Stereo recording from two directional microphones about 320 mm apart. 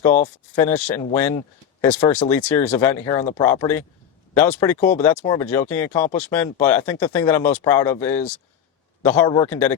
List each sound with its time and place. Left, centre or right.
0.5 s speech: centre
4.8 s speech: left
5.0 s speech: centre